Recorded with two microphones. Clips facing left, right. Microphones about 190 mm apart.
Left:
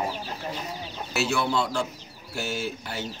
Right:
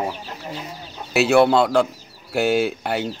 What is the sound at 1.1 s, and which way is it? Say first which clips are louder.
Speech: right 11 dB; 65° right (ahead or behind).